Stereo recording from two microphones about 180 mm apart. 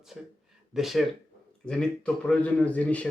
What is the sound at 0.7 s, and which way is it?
Speech, centre (ahead or behind).